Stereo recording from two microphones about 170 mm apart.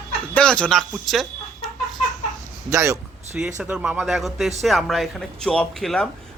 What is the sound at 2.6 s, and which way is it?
Speech, 15° right (ahead or behind).